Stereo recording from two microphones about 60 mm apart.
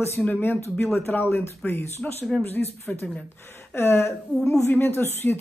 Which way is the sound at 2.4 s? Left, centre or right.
Left.